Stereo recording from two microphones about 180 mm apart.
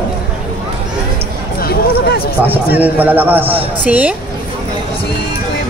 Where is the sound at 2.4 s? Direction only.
10° right (ahead or behind).